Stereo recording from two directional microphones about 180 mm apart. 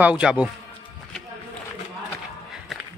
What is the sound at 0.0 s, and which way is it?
Speech, 5° right (ahead or behind).